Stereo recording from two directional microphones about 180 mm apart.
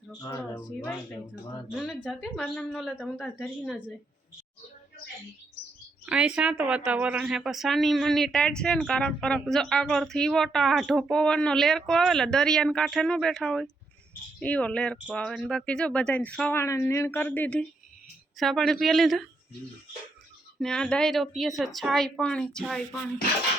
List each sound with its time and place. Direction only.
0.1 s speech: 15° left (ahead or behind)
1.7 s speech: centre (ahead or behind)
6.1 s speech: 5° right (ahead or behind)
20.6 s speech: 5° left (ahead or behind)